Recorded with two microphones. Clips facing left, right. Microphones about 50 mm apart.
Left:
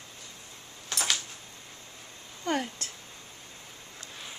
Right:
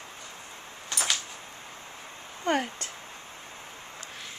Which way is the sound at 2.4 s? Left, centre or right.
Right.